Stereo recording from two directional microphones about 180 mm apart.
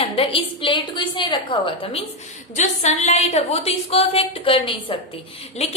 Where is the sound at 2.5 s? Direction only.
40° left (ahead or behind).